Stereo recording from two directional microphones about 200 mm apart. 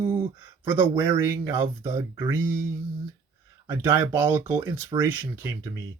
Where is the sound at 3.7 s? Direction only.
10° right (ahead or behind).